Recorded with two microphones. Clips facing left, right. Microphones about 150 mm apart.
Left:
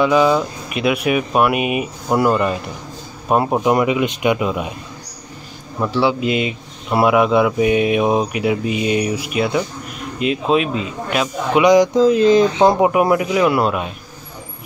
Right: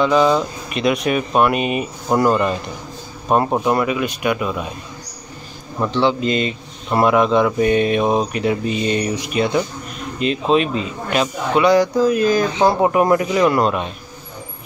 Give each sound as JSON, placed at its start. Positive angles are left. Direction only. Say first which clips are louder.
{"t": 0.0, "sound": "a man's voice", "louder": "left 1 dB", "side_deg": 10}
{"t": 3.7, "sound": "speech", "louder": "left 3 dB", "side_deg": 20}
{"t": 5.8, "sound": "a man's voice", "louder": "even", "side_deg": 10}
{"t": 11.5, "sound": "speech", "louder": "left 2 dB", "side_deg": 15}
{"t": 12.8, "sound": "speech", "louder": "even", "side_deg": 10}